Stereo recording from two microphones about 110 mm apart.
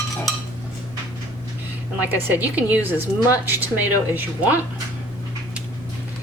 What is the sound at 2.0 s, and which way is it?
A woman's voice, 15° right (ahead or behind).